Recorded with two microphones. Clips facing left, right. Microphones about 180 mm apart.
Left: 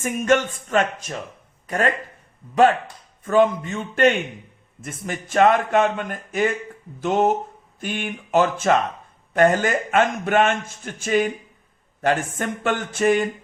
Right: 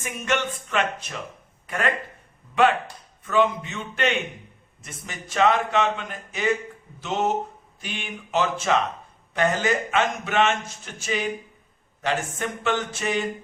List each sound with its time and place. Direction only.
0.0 s a man's voice: 45° left (ahead or behind)
3.2 s a man's voice: 45° left (ahead or behind)